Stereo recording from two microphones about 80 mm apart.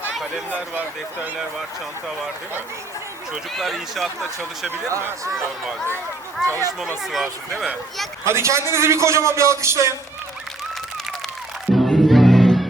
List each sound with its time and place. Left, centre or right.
0.1 s a sound: centre
0.5 s speech: right
3.5 s speech: centre
4.9 s a man's voice: right
6.5 s speech: right
6.8 s speech: centre
8.2 s a man's voice: right
11.9 s music: centre